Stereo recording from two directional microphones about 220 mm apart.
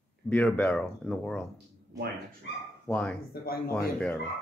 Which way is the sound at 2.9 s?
5° left (ahead or behind).